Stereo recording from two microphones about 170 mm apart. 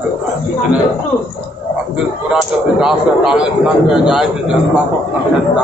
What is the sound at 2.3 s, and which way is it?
A man's voice, 5° right (ahead or behind).